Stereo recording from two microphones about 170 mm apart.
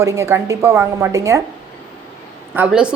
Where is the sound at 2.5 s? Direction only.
5° right (ahead or behind).